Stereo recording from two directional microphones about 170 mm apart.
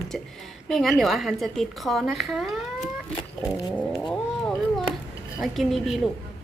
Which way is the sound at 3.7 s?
5° left (ahead or behind).